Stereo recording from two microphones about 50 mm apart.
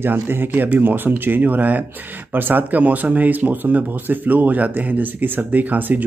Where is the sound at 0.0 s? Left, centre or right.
Right.